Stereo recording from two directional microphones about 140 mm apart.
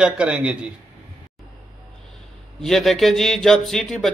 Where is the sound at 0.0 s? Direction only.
10° right (ahead or behind).